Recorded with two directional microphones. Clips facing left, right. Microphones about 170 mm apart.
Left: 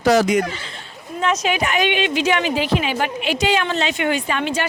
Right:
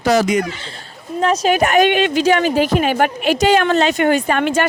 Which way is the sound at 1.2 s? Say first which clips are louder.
Right 5 dB; 35° right (ahead or behind).